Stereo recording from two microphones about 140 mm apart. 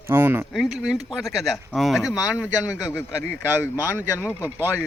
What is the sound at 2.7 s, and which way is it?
A man's voice, 20° left (ahead or behind).